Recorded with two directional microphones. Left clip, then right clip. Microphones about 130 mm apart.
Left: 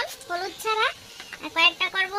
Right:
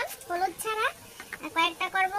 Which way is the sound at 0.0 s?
40° left (ahead or behind).